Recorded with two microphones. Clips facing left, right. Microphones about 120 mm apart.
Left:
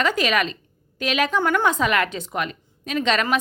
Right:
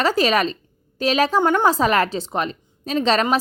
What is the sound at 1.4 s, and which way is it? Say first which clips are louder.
Speech: right 3 dB; 20° right (ahead or behind).